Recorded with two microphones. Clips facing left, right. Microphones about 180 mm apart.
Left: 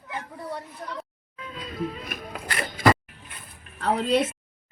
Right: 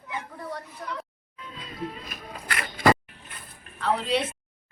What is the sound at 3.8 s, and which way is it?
Speech, 40° left (ahead or behind).